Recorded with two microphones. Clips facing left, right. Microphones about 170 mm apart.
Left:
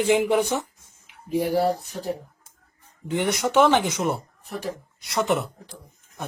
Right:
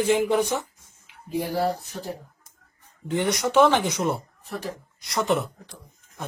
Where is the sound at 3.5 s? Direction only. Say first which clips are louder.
Even; centre (ahead or behind).